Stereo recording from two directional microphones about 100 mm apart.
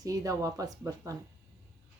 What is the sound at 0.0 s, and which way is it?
Speech, 35° right (ahead or behind).